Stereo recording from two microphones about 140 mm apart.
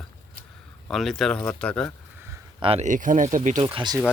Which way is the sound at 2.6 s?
45° right (ahead or behind).